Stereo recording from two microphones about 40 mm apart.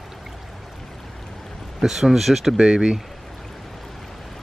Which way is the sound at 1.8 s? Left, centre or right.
Centre.